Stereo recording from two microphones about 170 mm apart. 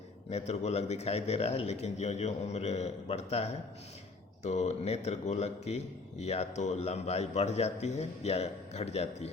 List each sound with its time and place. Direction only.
0.3 s a man's voice: 40° left (ahead or behind)